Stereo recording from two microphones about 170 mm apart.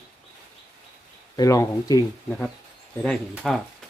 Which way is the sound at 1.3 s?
20° left (ahead or behind).